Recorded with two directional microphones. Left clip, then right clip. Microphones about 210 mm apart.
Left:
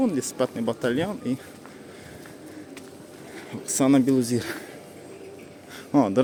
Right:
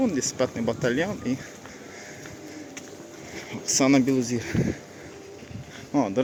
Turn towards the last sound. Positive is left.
turn(degrees=25)  # may be behind; listen again after turning